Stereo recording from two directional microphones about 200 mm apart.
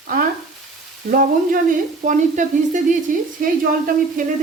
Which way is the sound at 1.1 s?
45° right (ahead or behind).